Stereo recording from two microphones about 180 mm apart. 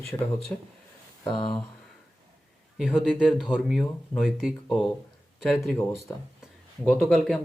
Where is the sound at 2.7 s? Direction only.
Centre (ahead or behind).